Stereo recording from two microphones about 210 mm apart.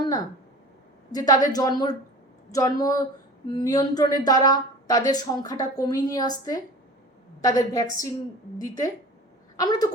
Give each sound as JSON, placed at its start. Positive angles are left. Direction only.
{"t": 1.1, "sound": "a woman's voice", "side_deg": 20}